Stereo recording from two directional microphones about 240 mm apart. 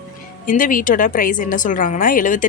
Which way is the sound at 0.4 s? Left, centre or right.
Left.